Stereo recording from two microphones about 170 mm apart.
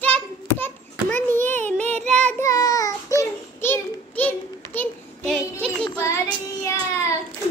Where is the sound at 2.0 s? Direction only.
5° left (ahead or behind).